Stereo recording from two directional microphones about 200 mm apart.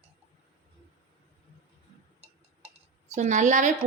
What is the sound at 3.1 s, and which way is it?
Speech, 40° right (ahead or behind).